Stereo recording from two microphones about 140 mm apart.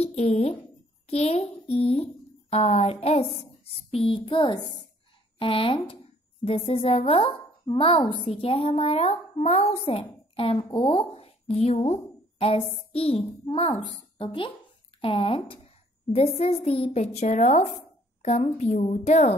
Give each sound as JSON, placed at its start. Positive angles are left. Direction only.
{"t": 0.0, "sound": "a woman's voice", "side_deg": 50}